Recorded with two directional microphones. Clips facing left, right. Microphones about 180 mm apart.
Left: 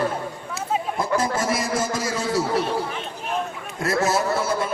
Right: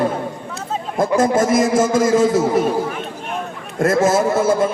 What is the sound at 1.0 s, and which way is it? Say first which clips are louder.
A man's voice: right 11 dB; 50° right (ahead or behind).